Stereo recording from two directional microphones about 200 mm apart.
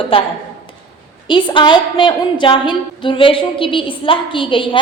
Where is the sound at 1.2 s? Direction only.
25° left (ahead or behind).